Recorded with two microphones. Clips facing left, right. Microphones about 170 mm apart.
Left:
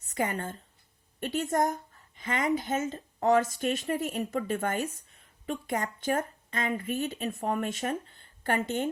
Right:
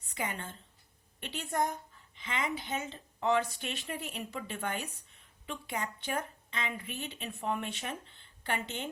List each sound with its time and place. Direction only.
0.1 s a woman's voice: 45° left (ahead or behind)